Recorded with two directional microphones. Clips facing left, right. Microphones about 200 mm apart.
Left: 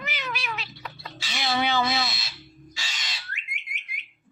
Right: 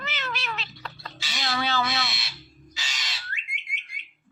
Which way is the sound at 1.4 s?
20° left (ahead or behind).